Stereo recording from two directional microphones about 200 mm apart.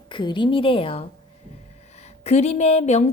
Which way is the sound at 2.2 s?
30° left (ahead or behind).